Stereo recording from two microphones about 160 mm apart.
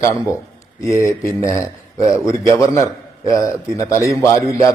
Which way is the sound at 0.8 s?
20° left (ahead or behind).